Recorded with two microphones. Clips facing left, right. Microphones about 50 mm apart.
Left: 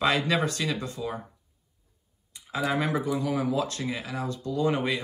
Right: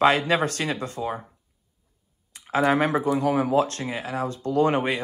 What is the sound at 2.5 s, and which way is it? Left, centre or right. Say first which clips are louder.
Speech: right 6 dB; right.